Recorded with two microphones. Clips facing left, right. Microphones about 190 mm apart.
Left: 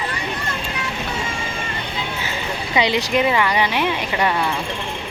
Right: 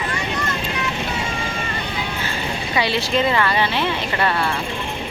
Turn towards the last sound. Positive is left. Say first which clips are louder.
# left 1 dB
turn(degrees=15)  # may be behind; listen again after turning